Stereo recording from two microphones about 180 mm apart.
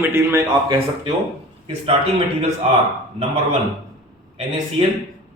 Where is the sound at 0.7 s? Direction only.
30° right (ahead or behind).